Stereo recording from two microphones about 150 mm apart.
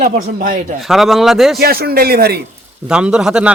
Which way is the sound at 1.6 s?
90° right.